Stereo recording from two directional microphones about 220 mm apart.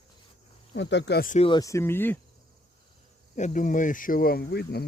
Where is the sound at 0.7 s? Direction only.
55° left (ahead or behind).